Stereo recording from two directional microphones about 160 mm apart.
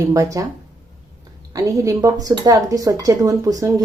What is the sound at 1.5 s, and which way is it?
A woman's voice, 20° right (ahead or behind).